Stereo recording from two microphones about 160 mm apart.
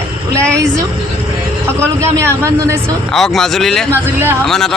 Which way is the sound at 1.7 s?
15° right (ahead or behind).